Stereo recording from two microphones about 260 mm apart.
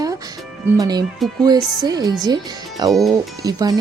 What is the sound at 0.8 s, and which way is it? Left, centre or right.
Speech, centre.